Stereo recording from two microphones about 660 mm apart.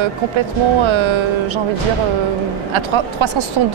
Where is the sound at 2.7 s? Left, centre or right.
Right.